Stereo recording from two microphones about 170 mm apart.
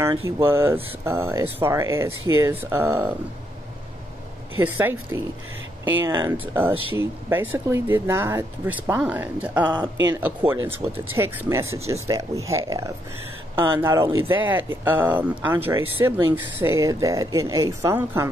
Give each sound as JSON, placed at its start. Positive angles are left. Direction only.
{"t": 0.0, "sound": "speech", "side_deg": -15}
{"t": 4.6, "sound": "speech", "side_deg": -10}